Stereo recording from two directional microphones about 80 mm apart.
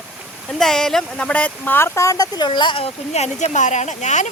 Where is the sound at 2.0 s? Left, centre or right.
Left.